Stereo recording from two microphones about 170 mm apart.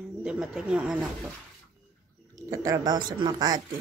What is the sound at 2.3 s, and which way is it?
Speech, 20° right (ahead or behind).